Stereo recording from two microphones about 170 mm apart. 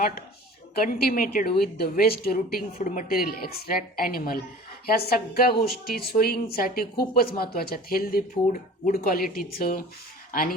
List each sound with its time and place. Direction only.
0.8 s speech: 60° left (ahead or behind)
2.7 s speech: 50° left (ahead or behind)